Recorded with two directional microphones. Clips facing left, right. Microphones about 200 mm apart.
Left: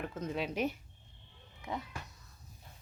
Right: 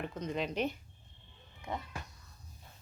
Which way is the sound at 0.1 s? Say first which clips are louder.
Even; 5° left (ahead or behind).